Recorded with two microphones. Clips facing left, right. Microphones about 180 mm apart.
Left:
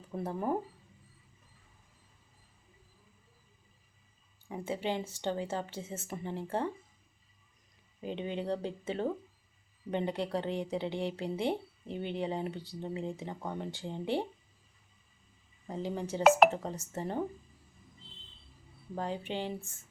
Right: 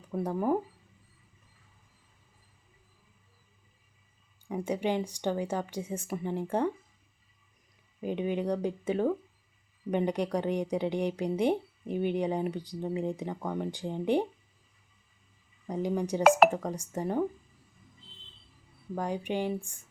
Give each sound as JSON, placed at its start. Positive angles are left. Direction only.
{"t": 0.2, "sound": "speech", "side_deg": -10}
{"t": 4.4, "sound": "speech", "side_deg": -15}
{"t": 8.0, "sound": "speech", "side_deg": -15}
{"t": 15.6, "sound": "speech", "side_deg": -15}
{"t": 18.9, "sound": "speech", "side_deg": -15}